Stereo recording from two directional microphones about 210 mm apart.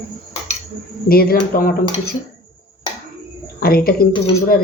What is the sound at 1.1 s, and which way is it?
Speech, 45° left (ahead or behind).